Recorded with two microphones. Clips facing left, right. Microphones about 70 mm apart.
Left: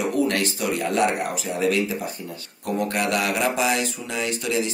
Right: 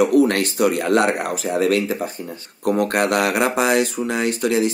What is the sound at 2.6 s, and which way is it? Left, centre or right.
Speech, right.